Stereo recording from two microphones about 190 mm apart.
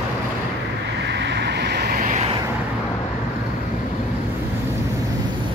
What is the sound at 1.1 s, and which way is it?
Vehicle, 65° right (ahead or behind).